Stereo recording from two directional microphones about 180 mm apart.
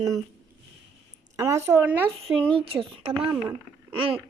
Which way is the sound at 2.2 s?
30° right (ahead or behind).